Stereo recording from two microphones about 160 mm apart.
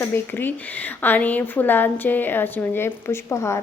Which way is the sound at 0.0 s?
15° left (ahead or behind).